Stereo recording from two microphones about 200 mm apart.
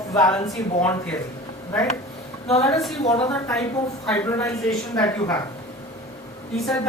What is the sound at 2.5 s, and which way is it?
A woman's voice, 15° left (ahead or behind).